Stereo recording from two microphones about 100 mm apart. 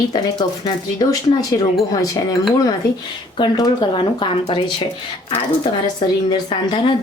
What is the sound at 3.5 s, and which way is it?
Speech, 45° left (ahead or behind).